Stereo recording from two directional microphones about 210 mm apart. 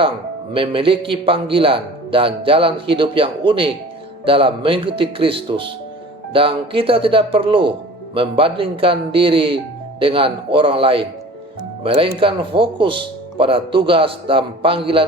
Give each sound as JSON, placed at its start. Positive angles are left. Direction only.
{"t": 0.5, "sound": "speech", "side_deg": -25}